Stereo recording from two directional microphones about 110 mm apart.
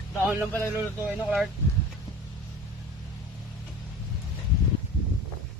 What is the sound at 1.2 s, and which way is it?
Speech, 5° right (ahead or behind).